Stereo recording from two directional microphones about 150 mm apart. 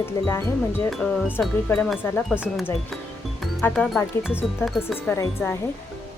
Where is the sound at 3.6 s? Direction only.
10° left (ahead or behind).